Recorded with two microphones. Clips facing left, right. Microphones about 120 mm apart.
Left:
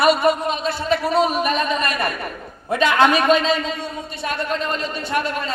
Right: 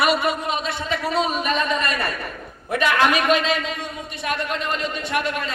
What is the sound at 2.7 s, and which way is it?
A man's voice, 25° left (ahead or behind).